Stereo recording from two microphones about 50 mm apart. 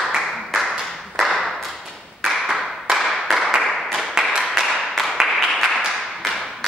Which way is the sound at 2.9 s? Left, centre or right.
Centre.